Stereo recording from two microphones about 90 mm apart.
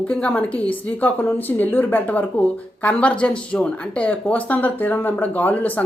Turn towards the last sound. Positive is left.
turn(degrees=20)  # may be behind; listen again after turning